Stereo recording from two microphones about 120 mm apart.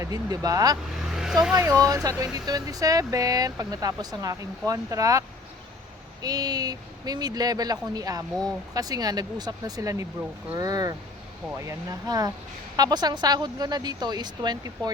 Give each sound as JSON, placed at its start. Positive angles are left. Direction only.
{"t": 0.0, "sound": "speech", "side_deg": -30}
{"t": 1.1, "sound": "vehicle", "side_deg": -5}
{"t": 1.5, "sound": "speech", "side_deg": -30}
{"t": 6.2, "sound": "speech", "side_deg": -35}